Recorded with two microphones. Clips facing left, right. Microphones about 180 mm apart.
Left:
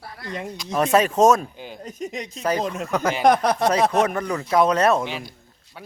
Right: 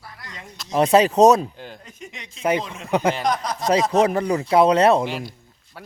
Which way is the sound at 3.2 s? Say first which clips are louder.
Left 6 dB; 60° left (ahead or behind).